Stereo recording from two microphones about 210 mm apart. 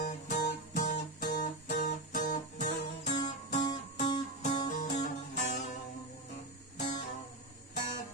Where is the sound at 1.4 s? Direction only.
40° left (ahead or behind).